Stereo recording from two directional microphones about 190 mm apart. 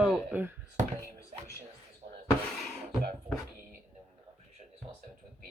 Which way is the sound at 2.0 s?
35° right (ahead or behind).